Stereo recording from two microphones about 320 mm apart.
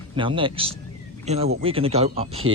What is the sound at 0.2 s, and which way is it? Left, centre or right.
A man's voice, centre.